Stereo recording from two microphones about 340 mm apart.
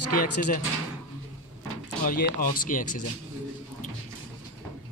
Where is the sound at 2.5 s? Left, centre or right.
Left.